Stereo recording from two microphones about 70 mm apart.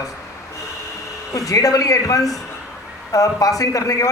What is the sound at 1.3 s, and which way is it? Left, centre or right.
A man's voice, left.